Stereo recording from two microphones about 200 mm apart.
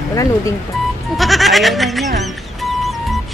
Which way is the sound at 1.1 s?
Centre (ahead or behind).